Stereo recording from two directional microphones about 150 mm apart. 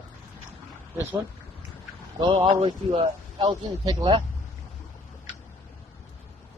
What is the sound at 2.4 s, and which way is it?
Speech, 30° right (ahead or behind).